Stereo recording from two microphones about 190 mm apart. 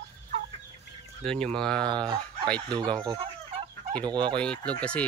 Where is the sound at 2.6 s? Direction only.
25° right (ahead or behind).